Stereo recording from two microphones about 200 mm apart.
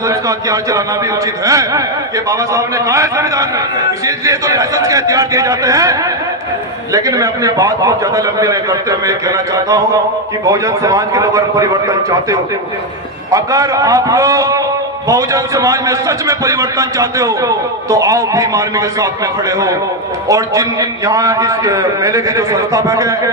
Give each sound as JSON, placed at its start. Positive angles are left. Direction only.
{"t": 0.1, "sound": "a man's voice", "side_deg": -15}